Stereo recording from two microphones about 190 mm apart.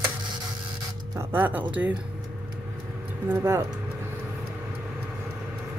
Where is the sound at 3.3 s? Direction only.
15° right (ahead or behind).